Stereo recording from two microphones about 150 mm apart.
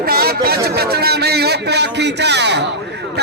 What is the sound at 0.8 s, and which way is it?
Speech, 90° right.